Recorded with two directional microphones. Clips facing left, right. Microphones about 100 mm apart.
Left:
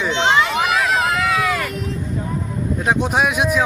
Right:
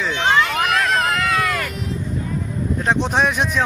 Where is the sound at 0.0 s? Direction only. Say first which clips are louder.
Left 1 dB; 20° left (ahead or behind).